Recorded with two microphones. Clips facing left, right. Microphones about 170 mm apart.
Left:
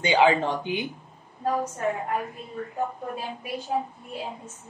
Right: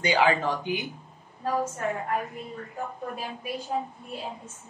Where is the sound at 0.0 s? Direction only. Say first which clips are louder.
Left 3 dB; 25° left (ahead or behind).